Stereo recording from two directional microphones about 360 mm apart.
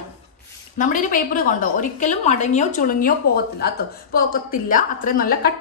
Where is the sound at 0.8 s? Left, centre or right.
Left.